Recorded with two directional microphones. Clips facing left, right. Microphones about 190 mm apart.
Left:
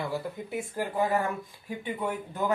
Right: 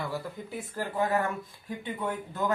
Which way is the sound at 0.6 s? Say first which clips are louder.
Left 2 dB; 15° left (ahead or behind).